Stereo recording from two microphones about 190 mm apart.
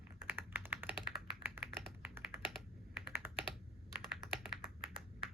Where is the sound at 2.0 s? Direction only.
10° right (ahead or behind).